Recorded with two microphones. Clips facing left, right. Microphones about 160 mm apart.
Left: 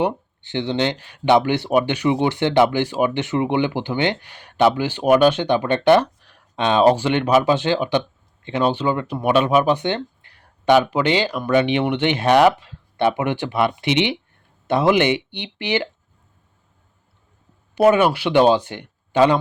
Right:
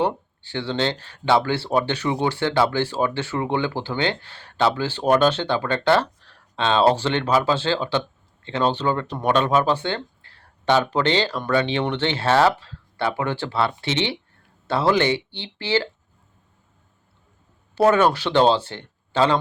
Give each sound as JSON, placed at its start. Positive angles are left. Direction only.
{"t": 0.0, "sound": "speech", "side_deg": 20}
{"t": 17.7, "sound": "speech", "side_deg": 15}